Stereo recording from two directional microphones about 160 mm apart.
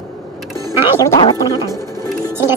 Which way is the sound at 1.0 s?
20° left (ahead or behind).